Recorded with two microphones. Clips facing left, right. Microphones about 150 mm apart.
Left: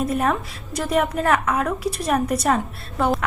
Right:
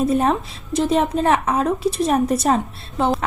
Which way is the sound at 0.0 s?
25° right (ahead or behind).